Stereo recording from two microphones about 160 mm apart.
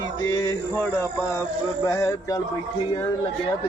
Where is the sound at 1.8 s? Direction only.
20° left (ahead or behind).